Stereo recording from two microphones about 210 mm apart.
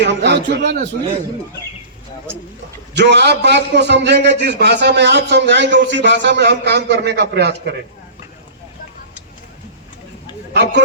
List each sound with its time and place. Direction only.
0.0 s a man's voice: 55° right (ahead or behind)
2.9 s a man's voice: 55° right (ahead or behind)
10.5 s a man's voice: 55° right (ahead or behind)